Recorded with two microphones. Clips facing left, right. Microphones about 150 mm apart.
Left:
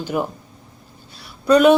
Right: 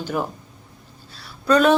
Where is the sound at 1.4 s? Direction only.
10° left (ahead or behind).